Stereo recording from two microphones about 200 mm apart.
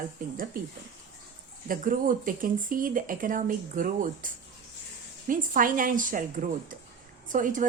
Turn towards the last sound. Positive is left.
turn(degrees=-40)  # may be behind; listen again after turning